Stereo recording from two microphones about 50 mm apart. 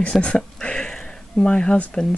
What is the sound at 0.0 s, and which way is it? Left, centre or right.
Speech, left.